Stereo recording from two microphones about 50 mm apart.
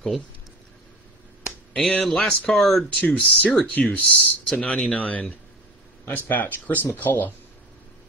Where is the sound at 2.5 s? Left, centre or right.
Centre.